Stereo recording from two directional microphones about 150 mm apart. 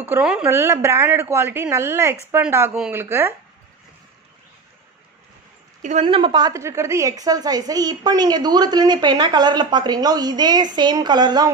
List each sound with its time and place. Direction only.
0.0 s a woman's voice: 10° right (ahead or behind)
0.5 s a woman's voice: 15° right (ahead or behind)
5.8 s a woman's voice: 50° right (ahead or behind)
6.0 s a woman's voice: 35° right (ahead or behind)